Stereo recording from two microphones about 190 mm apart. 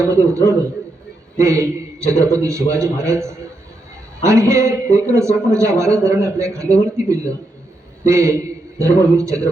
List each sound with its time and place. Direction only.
0.0 s a man's voice: 15° right (ahead or behind)